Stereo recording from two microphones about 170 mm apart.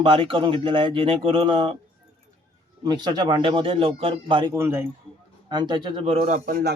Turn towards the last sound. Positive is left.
turn(degrees=-55)  # may be behind; listen again after turning